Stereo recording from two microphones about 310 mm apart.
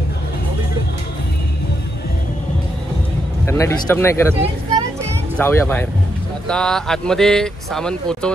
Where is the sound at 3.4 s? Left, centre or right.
Centre.